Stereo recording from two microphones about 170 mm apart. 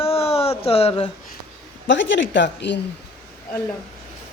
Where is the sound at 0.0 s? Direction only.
35° left (ahead or behind).